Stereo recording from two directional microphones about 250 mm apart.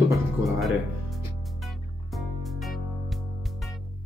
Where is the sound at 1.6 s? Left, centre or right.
Centre.